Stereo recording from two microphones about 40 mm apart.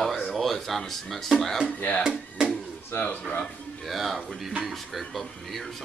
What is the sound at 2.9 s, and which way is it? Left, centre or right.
Speech, left.